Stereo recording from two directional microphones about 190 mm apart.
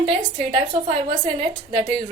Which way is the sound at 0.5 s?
30° right (ahead or behind).